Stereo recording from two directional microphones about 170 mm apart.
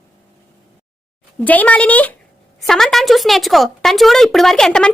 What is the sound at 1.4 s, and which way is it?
A woman's voice, 10° left (ahead or behind).